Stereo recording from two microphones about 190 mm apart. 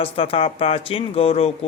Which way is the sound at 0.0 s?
30° left (ahead or behind).